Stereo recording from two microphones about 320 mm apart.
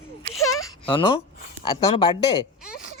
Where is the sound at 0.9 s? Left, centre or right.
Centre.